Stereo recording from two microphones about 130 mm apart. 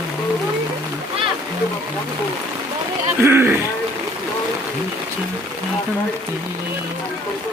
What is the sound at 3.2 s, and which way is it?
Speech, 15° right (ahead or behind).